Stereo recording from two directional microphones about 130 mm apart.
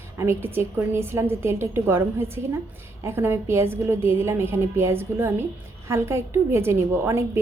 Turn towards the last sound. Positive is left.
turn(degrees=-20)  # may be behind; listen again after turning